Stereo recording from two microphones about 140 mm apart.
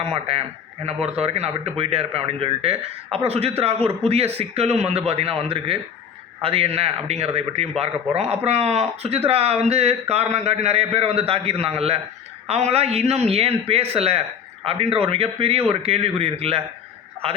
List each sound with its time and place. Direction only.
0.0 s a man's voice: 45° right (ahead or behind)